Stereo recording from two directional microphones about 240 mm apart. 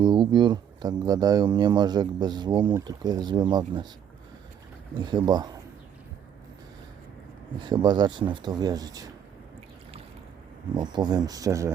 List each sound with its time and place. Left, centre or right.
0.0 s speech: centre
4.9 s speech: centre
7.6 s speech: centre
10.8 s speech: centre